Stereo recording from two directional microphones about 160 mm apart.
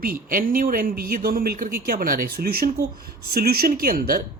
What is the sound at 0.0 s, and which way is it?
Speech, 60° right (ahead or behind).